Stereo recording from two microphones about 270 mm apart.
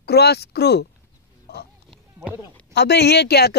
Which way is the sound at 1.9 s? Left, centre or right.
Centre.